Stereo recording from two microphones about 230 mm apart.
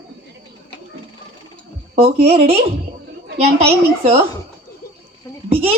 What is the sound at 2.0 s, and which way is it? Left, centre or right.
A woman's voice, right.